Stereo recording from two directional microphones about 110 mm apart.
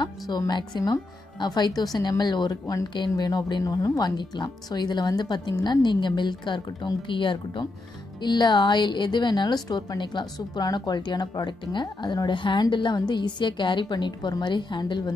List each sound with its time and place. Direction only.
0.5 s speech: 40° left (ahead or behind)
2.6 s a woman's voice: 30° left (ahead or behind)